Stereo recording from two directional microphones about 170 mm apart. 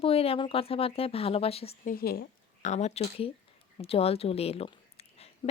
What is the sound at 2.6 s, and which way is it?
A woman's voice, 40° left (ahead or behind).